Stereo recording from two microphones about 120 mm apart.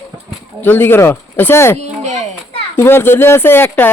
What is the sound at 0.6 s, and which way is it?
Speech, 15° left (ahead or behind).